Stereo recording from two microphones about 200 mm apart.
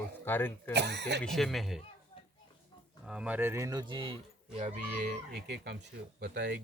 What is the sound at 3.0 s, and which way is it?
Speech, 5° right (ahead or behind).